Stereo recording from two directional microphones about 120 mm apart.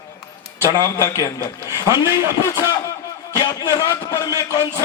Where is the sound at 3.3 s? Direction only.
30° left (ahead or behind).